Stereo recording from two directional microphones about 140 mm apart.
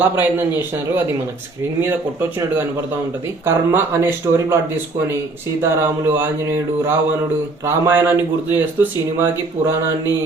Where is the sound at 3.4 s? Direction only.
15° right (ahead or behind).